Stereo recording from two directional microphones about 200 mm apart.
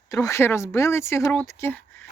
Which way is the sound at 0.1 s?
15° left (ahead or behind).